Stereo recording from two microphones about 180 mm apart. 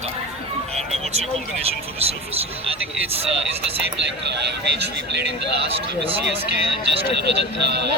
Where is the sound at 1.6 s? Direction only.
35° right (ahead or behind).